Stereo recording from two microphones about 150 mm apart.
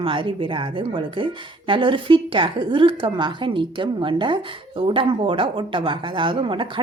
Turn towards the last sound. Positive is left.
turn(degrees=-35)  # may be behind; listen again after turning